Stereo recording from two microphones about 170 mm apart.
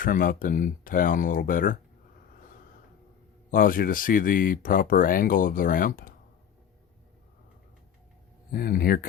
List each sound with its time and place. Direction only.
0.0 s speech: 55° left (ahead or behind)
3.5 s speech: 55° left (ahead or behind)
8.5 s speech: 60° left (ahead or behind)